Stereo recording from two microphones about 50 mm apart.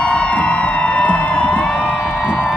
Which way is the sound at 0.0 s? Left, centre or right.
Left.